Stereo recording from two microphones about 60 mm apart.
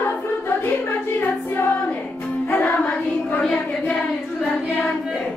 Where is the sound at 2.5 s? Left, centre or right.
Left.